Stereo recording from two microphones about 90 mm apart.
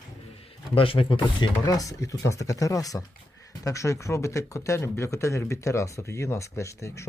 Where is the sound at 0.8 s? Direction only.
90° left.